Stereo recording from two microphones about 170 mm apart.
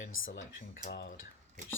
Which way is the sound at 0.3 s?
55° left (ahead or behind).